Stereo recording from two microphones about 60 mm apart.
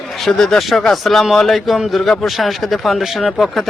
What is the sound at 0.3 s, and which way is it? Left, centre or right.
Speech, centre.